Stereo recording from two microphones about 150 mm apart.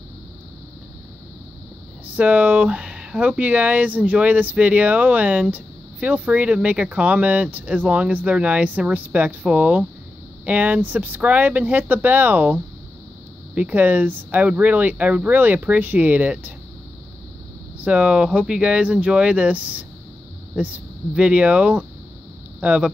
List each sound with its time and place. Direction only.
2.1 s speech: 10° right (ahead or behind)
13.6 s speech: 10° right (ahead or behind)
17.7 s speech: 10° right (ahead or behind)